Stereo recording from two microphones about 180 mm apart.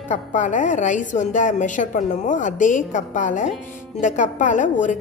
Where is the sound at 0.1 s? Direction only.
45° left (ahead or behind).